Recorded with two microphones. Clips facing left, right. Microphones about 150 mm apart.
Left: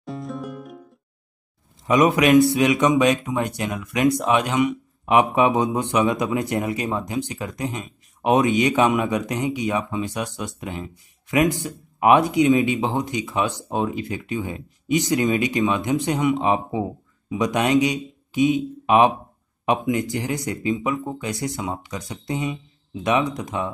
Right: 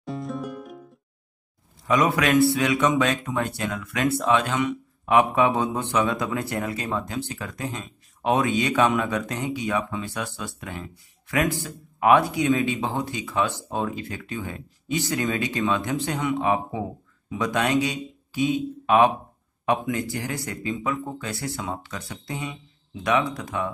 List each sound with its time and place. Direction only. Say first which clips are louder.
0.0 s music: even; centre (ahead or behind)
1.9 s a man's voice: left 5 dB; 20° left (ahead or behind)